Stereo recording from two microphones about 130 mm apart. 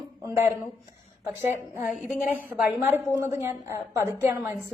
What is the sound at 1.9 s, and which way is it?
Speech, 5° right (ahead or behind).